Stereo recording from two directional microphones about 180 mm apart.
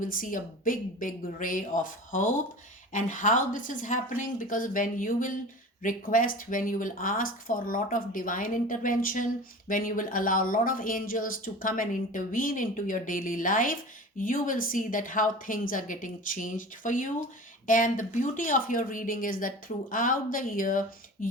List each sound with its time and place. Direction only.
0.0 s speech: 50° left (ahead or behind)